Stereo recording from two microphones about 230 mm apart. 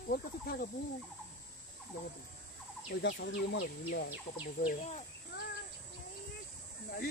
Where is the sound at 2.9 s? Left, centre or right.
Left.